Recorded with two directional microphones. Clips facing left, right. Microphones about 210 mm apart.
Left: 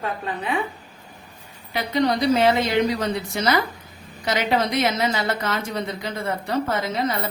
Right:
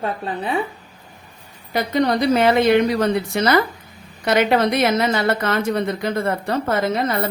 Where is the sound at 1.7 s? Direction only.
50° right (ahead or behind).